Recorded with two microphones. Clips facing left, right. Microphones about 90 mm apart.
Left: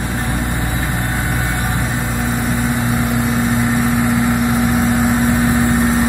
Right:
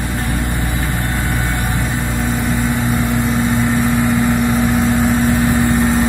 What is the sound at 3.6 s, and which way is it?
Vehicle, 20° left (ahead or behind).